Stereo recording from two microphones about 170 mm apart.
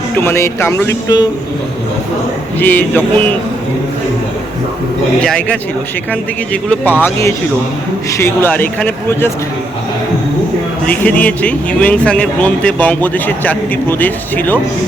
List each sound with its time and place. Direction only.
0.2 s a man's voice: 15° left (ahead or behind)
2.6 s a man's voice: 10° left (ahead or behind)
5.2 s a man's voice: 5° left (ahead or behind)
10.8 s a man's voice: 10° left (ahead or behind)